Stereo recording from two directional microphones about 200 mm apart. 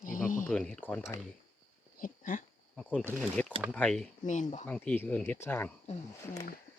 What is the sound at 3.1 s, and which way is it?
Speech, 5° left (ahead or behind).